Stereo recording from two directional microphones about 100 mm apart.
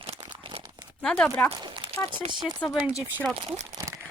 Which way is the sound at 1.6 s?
60° right (ahead or behind).